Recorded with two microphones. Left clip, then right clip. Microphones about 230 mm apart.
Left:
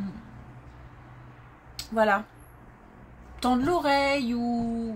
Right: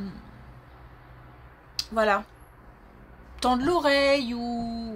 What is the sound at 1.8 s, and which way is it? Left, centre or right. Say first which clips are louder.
Speech: even; right.